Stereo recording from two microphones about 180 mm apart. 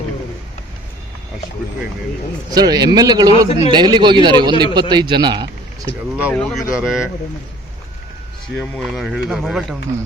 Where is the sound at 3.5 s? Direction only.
35° left (ahead or behind).